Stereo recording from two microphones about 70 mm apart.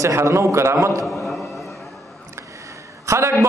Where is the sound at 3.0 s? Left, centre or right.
Right.